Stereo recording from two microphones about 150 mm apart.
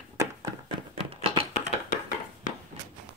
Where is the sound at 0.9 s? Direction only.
40° right (ahead or behind).